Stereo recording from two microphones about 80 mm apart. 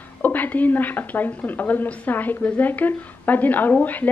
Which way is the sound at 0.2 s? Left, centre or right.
Left.